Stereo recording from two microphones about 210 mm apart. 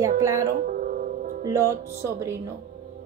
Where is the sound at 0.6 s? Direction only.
40° right (ahead or behind).